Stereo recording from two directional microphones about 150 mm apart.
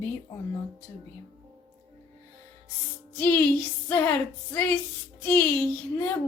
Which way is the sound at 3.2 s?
10° left (ahead or behind).